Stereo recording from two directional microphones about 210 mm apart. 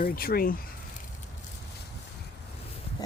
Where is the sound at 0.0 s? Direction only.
45° left (ahead or behind).